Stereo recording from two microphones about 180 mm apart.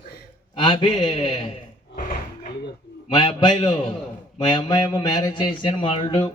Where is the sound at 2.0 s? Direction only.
50° left (ahead or behind).